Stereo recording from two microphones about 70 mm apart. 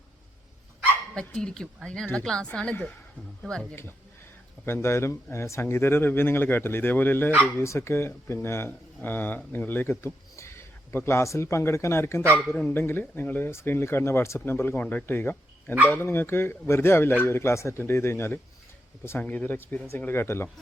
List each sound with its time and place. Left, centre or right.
1.1 s a woman's voice: centre
4.6 s speech: left
7.6 s speech: left
14.8 s speech: left
19.2 s speech: left
20.1 s speech: left